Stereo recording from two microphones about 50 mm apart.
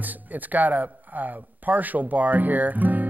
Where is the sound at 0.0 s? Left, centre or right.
Right.